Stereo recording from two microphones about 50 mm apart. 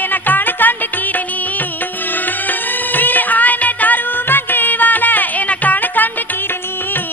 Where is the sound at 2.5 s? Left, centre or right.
Left.